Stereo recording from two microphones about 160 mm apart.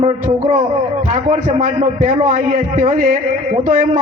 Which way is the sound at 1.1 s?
50° right (ahead or behind).